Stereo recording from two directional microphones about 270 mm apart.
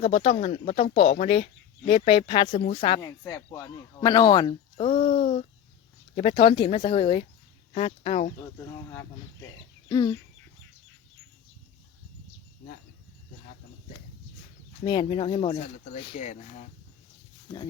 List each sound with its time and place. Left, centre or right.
0.0 s speech: left
8.7 s speech: centre
14.8 s speech: centre